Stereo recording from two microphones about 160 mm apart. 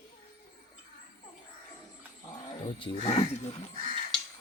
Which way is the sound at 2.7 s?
30° left (ahead or behind).